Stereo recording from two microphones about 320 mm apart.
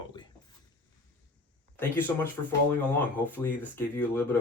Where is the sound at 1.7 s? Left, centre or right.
Centre.